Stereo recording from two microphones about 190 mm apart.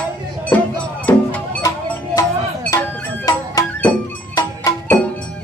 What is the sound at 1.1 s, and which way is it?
Music, 15° left (ahead or behind).